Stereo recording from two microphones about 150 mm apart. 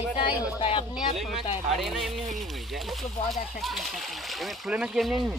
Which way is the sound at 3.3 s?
Centre (ahead or behind).